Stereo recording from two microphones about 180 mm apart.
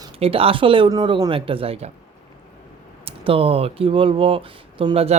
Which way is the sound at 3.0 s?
30° right (ahead or behind).